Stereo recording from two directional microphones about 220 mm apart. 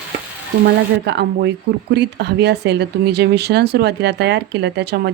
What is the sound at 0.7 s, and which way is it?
Speech, 50° right (ahead or behind).